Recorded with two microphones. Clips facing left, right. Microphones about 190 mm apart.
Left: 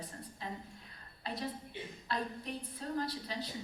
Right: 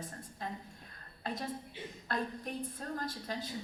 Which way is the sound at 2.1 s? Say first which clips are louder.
Right 1 dB; 50° right (ahead or behind).